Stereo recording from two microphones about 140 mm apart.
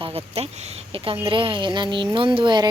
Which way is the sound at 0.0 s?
45° right (ahead or behind).